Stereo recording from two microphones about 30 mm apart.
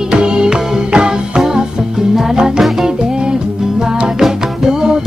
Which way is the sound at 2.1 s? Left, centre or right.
Right.